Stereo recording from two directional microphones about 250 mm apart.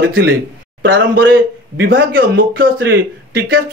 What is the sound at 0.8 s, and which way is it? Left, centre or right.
Speech, right.